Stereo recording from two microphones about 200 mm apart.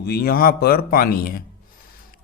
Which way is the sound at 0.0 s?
50° left (ahead or behind).